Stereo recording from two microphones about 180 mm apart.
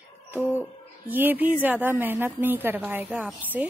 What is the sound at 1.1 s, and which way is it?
A woman's voice, 10° right (ahead or behind).